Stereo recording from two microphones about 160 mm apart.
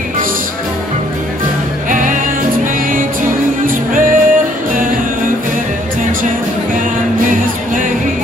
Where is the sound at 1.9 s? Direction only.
55° right (ahead or behind).